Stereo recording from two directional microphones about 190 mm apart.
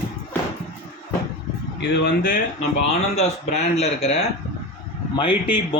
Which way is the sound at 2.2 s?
45° left (ahead or behind).